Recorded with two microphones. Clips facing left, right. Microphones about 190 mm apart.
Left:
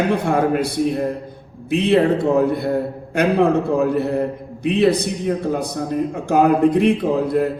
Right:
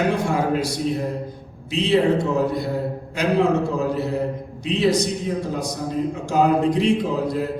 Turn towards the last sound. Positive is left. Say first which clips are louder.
# left 5 dB
turn(degrees=55)  # may be behind; listen again after turning